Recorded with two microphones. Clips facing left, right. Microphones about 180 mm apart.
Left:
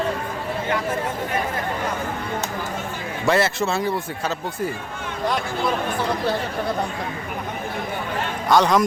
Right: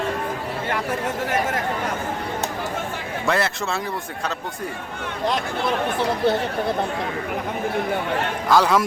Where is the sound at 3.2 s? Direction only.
Centre (ahead or behind).